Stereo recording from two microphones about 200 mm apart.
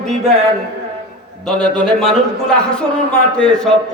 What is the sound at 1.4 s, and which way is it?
A man's voice, centre (ahead or behind).